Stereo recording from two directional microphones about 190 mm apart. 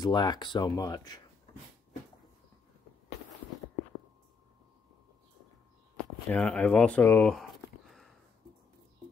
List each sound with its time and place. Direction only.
0.0 s speech: 20° left (ahead or behind)
6.2 s speech: 5° left (ahead or behind)